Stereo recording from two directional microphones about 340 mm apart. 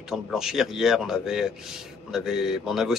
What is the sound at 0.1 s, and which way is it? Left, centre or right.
A man's voice, centre.